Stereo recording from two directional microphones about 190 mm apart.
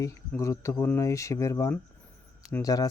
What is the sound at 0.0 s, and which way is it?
Speech, 15° left (ahead or behind).